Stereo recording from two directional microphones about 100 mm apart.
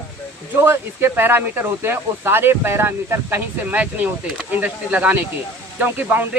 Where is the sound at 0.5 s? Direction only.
25° right (ahead or behind).